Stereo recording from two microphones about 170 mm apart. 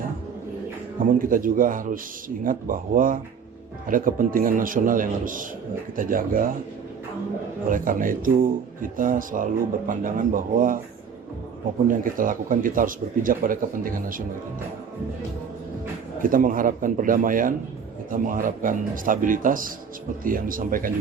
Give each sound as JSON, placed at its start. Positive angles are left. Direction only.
{"t": 1.2, "sound": "speech", "side_deg": -55}
{"t": 7.7, "sound": "speech", "side_deg": -50}
{"t": 11.9, "sound": "speech", "side_deg": -50}
{"t": 16.2, "sound": "speech", "side_deg": -55}